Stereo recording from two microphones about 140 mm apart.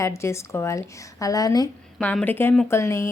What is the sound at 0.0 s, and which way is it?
A woman's voice, 20° left (ahead or behind).